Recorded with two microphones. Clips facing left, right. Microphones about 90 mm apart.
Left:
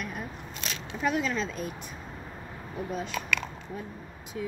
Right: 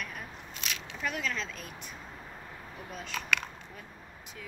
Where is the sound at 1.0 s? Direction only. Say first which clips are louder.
Left 7 dB; 25° left (ahead or behind).